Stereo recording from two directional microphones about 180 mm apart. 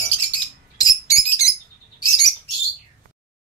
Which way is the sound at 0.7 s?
20° left (ahead or behind).